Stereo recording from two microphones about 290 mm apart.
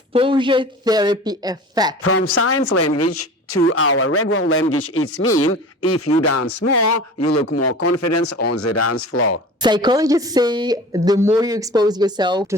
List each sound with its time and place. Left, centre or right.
0.1 s a woman's voice: centre
2.0 s speech: left
5.5 s speech: centre
6.2 s speech: left
9.6 s a woman's voice: centre